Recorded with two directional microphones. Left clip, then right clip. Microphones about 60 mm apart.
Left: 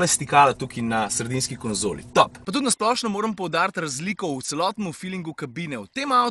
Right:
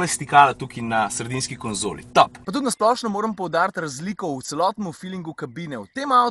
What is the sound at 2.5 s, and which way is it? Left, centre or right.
Speech, right.